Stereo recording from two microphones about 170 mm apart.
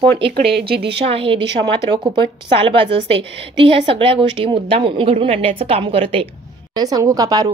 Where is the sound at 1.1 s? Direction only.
35° right (ahead or behind).